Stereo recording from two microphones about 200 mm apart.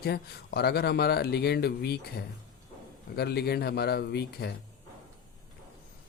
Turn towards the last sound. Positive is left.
turn(degrees=55)  # may be behind; listen again after turning